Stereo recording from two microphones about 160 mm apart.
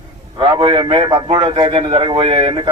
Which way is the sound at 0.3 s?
30° right (ahead or behind).